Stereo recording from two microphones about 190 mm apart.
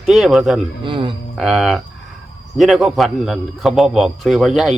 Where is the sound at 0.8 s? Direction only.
25° right (ahead or behind).